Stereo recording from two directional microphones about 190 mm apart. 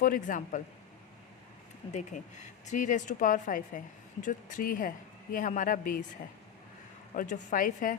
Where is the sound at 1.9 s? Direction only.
40° left (ahead or behind).